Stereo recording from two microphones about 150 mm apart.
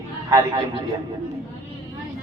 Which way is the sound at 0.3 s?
20° right (ahead or behind).